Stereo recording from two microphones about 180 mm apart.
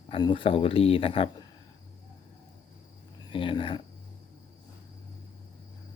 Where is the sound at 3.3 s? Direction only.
30° left (ahead or behind).